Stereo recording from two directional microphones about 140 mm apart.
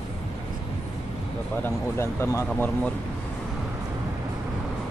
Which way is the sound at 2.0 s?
20° left (ahead or behind).